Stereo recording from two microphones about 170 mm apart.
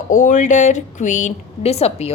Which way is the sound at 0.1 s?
50° left (ahead or behind).